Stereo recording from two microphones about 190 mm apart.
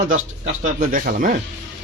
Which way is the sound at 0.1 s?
40° right (ahead or behind).